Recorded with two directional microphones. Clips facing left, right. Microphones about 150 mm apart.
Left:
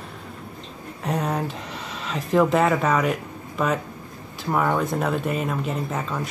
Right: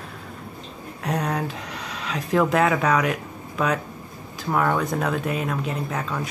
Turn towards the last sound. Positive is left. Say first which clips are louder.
# even
turn(degrees=0)  # may be behind; listen again after turning